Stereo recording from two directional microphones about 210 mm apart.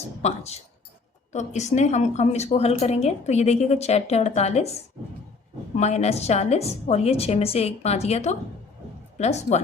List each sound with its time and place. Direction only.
0.2 s a woman's voice: 30° left (ahead or behind)
5.7 s a woman's voice: 30° left (ahead or behind)